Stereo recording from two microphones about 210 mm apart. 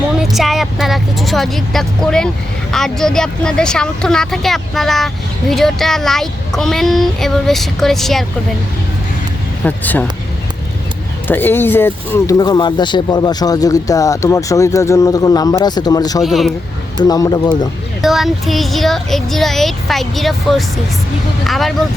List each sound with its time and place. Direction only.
0.2 s vehicle: centre (ahead or behind)
2.7 s speech: centre (ahead or behind)
9.6 s speech: 5° left (ahead or behind)
11.3 s speech: 10° left (ahead or behind)
16.2 s speech: centre (ahead or behind)
17.0 s speech: 15° left (ahead or behind)
18.0 s speech: centre (ahead or behind)